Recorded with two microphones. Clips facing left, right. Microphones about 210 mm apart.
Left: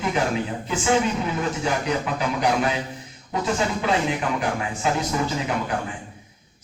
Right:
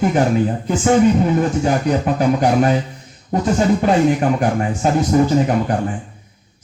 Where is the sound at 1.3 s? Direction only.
45° right (ahead or behind).